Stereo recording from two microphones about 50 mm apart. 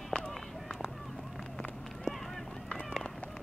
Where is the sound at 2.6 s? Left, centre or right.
Left.